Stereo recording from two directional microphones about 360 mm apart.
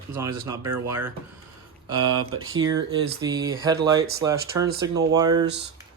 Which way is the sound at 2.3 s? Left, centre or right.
Right.